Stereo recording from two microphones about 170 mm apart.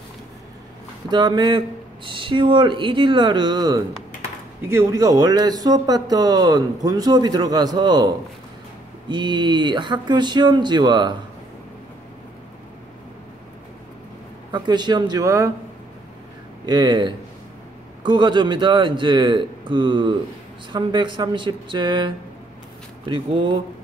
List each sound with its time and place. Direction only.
1.1 s speech: 25° right (ahead or behind)
9.1 s speech: 25° right (ahead or behind)
14.5 s speech: 25° right (ahead or behind)
16.6 s speech: 25° right (ahead or behind)